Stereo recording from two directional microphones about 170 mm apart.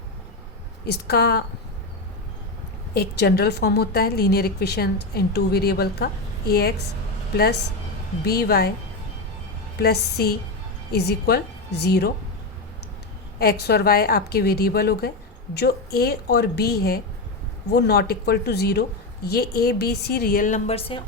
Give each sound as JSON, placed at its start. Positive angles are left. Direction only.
{"t": 0.9, "sound": "a woman's voice", "side_deg": 65}
{"t": 2.9, "sound": "a woman's voice", "side_deg": 70}
{"t": 8.2, "sound": "a woman's voice", "side_deg": 65}
{"t": 9.8, "sound": "a woman's voice", "side_deg": 65}
{"t": 13.4, "sound": "a woman's voice", "side_deg": 65}